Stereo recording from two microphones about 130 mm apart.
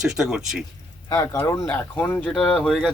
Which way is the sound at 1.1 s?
20° left (ahead or behind).